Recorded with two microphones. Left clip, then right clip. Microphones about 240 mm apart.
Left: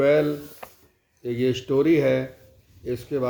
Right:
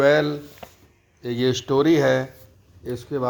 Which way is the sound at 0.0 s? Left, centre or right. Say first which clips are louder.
Right 2 dB; right.